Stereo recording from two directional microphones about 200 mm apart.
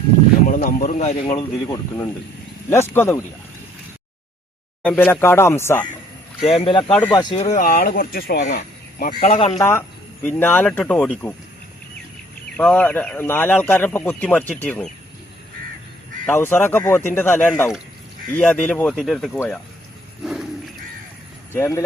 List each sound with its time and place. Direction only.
0.4 s speech: 45° left (ahead or behind); by 1.7 s 25° left (ahead or behind)
1.7 s speech: 15° left (ahead or behind)
4.8 s speech: 10° left (ahead or behind)
6.6 s speech: 25° left (ahead or behind)
7.4 s speech: 40° left (ahead or behind)
8.5 s a sound: 45° left (ahead or behind)
9.2 s speech: 35° left (ahead or behind)
9.6 s speech: 10° left (ahead or behind)
12.5 s speech: 5° left (ahead or behind)
16.2 s speech: 10° left (ahead or behind)
20.2 s a sound: 5° right (ahead or behind)
21.5 s speech: 15° left (ahead or behind)